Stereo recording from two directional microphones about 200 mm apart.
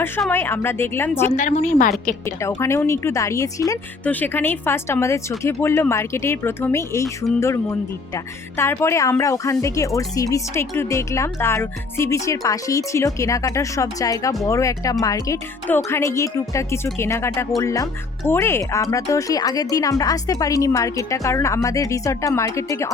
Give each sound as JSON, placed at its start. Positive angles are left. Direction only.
{"t": 0.2, "sound": "speech", "side_deg": 10}
{"t": 1.3, "sound": "a woman's voice", "side_deg": 40}
{"t": 2.6, "sound": "speech", "side_deg": 15}